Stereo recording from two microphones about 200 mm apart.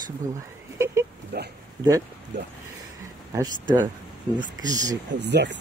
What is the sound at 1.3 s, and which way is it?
Speech, 55° right (ahead or behind).